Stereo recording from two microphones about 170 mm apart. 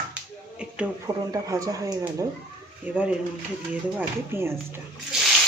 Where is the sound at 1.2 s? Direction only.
20° right (ahead or behind).